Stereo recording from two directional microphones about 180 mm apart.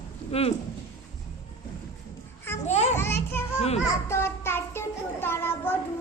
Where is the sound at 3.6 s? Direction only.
35° left (ahead or behind).